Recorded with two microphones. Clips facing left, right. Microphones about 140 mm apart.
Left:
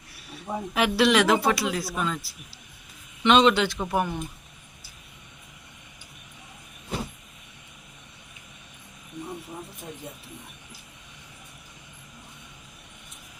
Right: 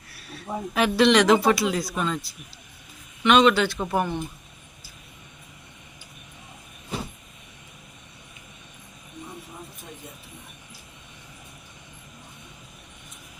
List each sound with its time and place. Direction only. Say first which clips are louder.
0.1 s a sound: even; 15° left (ahead or behind)
0.5 s speech: right 2 dB; 5° left (ahead or behind)
3.2 s a man's voice: right 1 dB; 25° left (ahead or behind)
3.8 s speech: right 1 dB; centre (ahead or behind)